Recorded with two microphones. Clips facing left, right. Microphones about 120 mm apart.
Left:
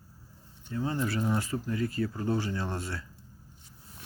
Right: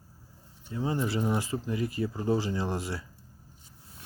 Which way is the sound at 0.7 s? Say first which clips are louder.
Right 1 dB; 15° right (ahead or behind).